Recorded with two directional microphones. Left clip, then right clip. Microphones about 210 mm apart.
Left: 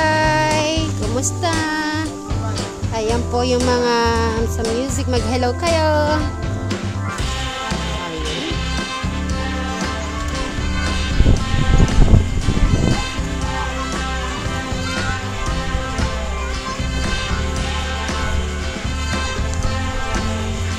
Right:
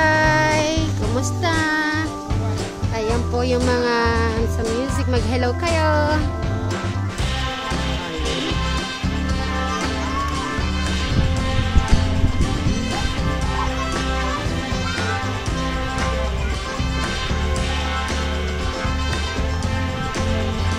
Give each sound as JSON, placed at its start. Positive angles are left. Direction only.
{"t": 0.0, "sound": "music", "side_deg": 10}
{"t": 5.1, "sound": "speech", "side_deg": 15}